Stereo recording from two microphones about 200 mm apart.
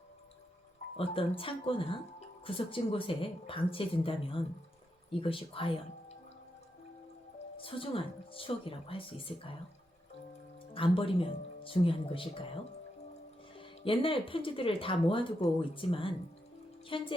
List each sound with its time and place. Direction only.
0.9 s speech: 30° left (ahead or behind)
7.5 s speech: 25° left (ahead or behind)
10.8 s speech: 25° left (ahead or behind)
13.6 s speech: 25° left (ahead or behind)